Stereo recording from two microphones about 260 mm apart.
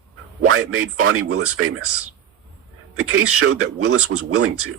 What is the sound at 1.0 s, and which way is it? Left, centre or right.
Speech, right.